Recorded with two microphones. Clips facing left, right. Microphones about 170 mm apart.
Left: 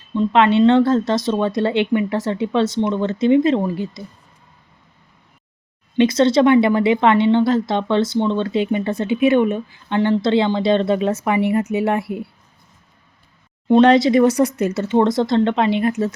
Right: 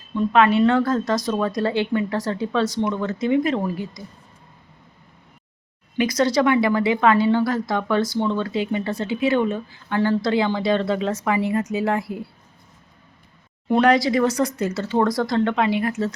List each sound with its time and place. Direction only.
0.1 s a woman's voice: 25° left (ahead or behind)
6.0 s a woman's voice: 25° left (ahead or behind)
13.7 s a woman's voice: 25° left (ahead or behind)